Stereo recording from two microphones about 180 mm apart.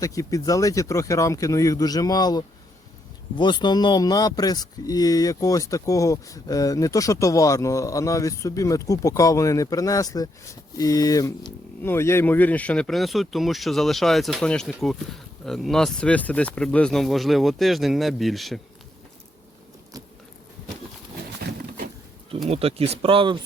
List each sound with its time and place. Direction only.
0.0 s speech: 20° left (ahead or behind); by 18.6 s centre (ahead or behind)
21.4 s a sound: 65° right (ahead or behind)
22.4 s speech: 35° right (ahead or behind)